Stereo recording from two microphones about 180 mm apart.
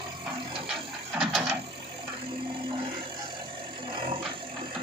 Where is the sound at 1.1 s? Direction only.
Centre (ahead or behind).